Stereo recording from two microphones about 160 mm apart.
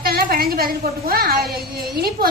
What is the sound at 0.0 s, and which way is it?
A woman's voice, 70° right (ahead or behind).